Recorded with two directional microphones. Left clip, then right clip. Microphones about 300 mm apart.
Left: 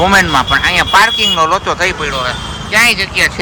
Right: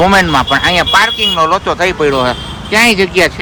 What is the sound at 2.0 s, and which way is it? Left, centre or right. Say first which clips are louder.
Speech: right 5 dB; centre.